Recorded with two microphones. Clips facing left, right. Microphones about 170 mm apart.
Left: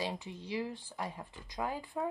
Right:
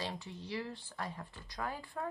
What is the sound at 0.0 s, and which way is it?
Speech, 15° left (ahead or behind).